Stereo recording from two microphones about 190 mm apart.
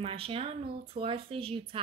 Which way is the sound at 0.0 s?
30° right (ahead or behind).